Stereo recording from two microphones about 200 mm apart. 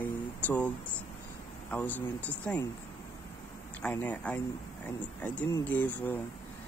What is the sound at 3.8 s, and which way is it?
Speech, 5° left (ahead or behind).